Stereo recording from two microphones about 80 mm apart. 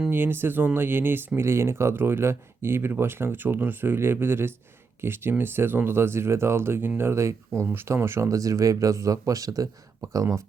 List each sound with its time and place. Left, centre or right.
0.1 s speech: right
8.3 s speech: right